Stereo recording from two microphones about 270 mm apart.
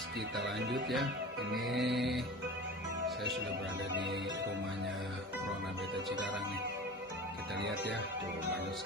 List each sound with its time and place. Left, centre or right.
0.4 s speech: right
1.8 s music: centre